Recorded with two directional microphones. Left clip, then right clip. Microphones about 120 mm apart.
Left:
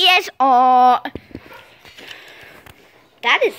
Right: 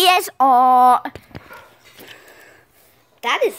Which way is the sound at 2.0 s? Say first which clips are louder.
Left 5 dB; centre (ahead or behind).